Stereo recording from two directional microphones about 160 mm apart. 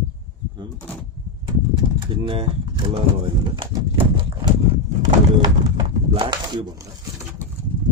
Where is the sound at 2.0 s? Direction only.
35° right (ahead or behind).